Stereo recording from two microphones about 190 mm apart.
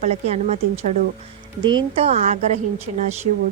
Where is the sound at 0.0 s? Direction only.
35° right (ahead or behind).